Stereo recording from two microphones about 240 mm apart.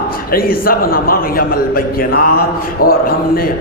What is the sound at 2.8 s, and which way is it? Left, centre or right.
Speech, left.